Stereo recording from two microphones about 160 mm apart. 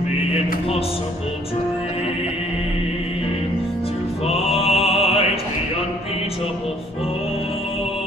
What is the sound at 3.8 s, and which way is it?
Music, 40° left (ahead or behind).